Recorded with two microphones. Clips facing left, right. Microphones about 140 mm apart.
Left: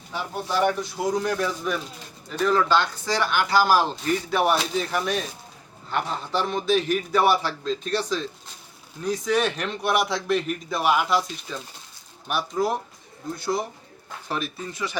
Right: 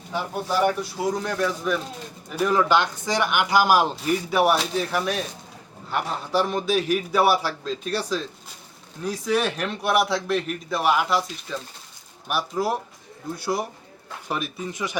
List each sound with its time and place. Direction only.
0.1 s speech: 10° right (ahead or behind)
2.3 s a man's voice: 10° right (ahead or behind)